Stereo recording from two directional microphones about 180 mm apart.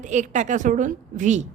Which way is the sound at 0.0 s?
40° right (ahead or behind).